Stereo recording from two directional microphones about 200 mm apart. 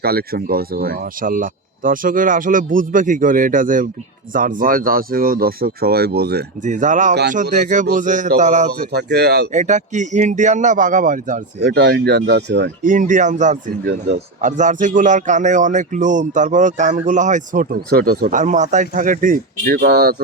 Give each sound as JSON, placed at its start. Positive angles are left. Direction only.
{"t": 0.0, "sound": "speech", "side_deg": -50}
{"t": 6.7, "sound": "a man's voice", "side_deg": -40}
{"t": 8.9, "sound": "speech", "side_deg": -55}
{"t": 9.5, "sound": "a man's voice", "side_deg": -35}
{"t": 11.6, "sound": "speech", "side_deg": -55}
{"t": 12.8, "sound": "a man's voice", "side_deg": -40}
{"t": 19.8, "sound": "speech", "side_deg": -55}